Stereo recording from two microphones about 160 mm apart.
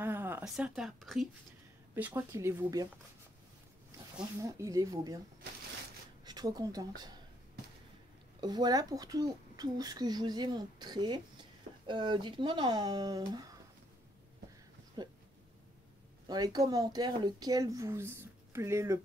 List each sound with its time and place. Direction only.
0.0 s speech: 10° right (ahead or behind)
2.0 s speech: 15° right (ahead or behind)
4.4 s a child's voice: 20° right (ahead or behind)
6.2 s speech: 25° right (ahead or behind)
8.4 s a child's voice: 25° right (ahead or behind)
15.0 s speech: 30° right (ahead or behind)
16.3 s a child's voice: 25° right (ahead or behind)